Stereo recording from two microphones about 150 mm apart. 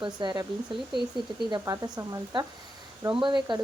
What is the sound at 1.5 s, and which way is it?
Speech, 25° right (ahead or behind).